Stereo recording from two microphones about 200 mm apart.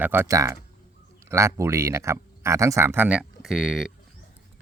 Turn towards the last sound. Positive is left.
turn(degrees=0)  # may be behind; listen again after turning